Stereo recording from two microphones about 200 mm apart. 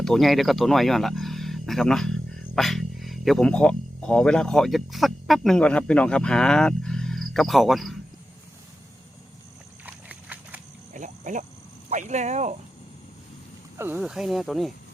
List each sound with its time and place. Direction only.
0.0 s speech: centre (ahead or behind)
9.8 s horse: 10° right (ahead or behind)
10.9 s a sound: 40° right (ahead or behind)
11.9 s speech: 35° right (ahead or behind)
13.7 s speech: 10° right (ahead or behind)